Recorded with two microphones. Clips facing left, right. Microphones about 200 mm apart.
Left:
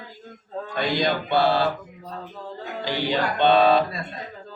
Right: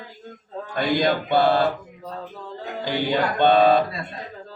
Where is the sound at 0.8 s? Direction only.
55° right (ahead or behind).